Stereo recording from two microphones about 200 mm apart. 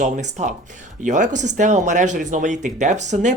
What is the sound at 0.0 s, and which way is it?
Speech, 35° right (ahead or behind).